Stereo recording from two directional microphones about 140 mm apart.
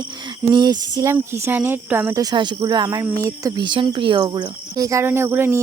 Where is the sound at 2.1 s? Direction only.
25° right (ahead or behind).